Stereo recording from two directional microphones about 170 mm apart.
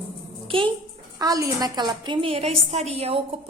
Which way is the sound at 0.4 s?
30° right (ahead or behind).